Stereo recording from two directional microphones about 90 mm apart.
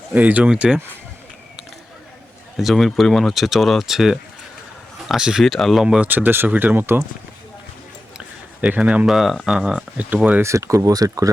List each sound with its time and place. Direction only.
0.1 s speech: 20° right (ahead or behind)
2.6 s speech: centre (ahead or behind)
6.1 s speech: 20° right (ahead or behind)
8.6 s speech: 15° right (ahead or behind)
9.0 s speech: centre (ahead or behind)
9.6 s speech: 10° right (ahead or behind)
10.4 s speech: 35° right (ahead or behind)